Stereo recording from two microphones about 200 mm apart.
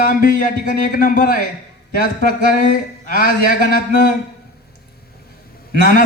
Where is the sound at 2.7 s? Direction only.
45° left (ahead or behind).